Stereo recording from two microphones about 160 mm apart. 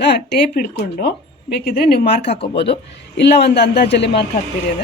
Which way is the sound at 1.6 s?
75° left (ahead or behind).